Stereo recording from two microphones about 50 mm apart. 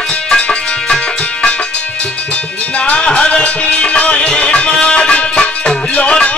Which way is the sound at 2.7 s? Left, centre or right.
Left.